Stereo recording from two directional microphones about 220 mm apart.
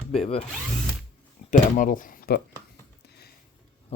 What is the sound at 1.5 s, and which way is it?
Speech, 35° left (ahead or behind).